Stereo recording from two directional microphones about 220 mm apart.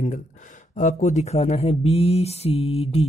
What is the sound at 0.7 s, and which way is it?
Speech, 35° left (ahead or behind).